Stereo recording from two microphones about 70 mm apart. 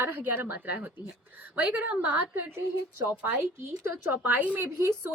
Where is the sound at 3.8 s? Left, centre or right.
Right.